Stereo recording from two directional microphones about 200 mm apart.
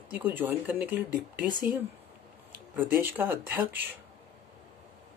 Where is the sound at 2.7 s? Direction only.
10° right (ahead or behind).